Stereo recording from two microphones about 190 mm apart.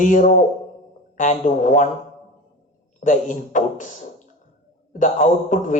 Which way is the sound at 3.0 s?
40° left (ahead or behind).